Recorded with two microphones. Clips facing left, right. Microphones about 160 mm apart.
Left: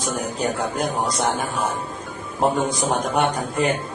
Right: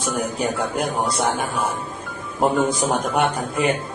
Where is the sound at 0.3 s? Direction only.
10° right (ahead or behind).